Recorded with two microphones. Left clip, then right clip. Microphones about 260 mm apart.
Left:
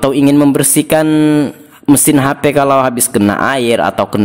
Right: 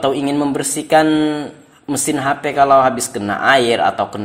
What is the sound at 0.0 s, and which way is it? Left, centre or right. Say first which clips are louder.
Speech: left 7 dB; left.